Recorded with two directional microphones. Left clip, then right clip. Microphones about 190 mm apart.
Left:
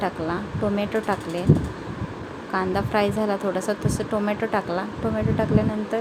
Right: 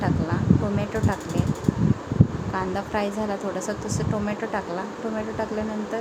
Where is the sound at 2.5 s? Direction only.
15° left (ahead or behind).